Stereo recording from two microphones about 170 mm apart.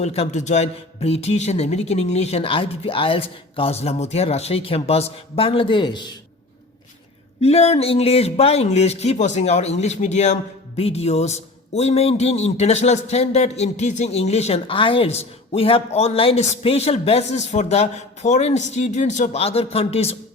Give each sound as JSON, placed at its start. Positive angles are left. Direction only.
{"t": 0.0, "sound": "a man's voice", "side_deg": 40}
{"t": 7.4, "sound": "a man's voice", "side_deg": 40}